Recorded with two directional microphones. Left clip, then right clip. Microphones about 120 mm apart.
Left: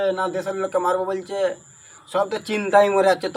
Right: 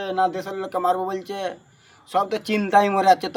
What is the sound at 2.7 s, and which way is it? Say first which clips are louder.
Speech: left 1 dB; 45° right (ahead or behind).